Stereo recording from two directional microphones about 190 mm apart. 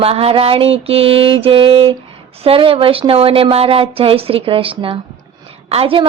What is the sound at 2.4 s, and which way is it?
Speech, 30° right (ahead or behind).